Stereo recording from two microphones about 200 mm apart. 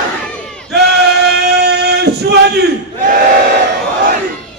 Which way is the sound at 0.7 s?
55° right (ahead or behind).